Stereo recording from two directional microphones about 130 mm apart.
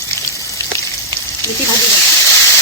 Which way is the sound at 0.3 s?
25° left (ahead or behind).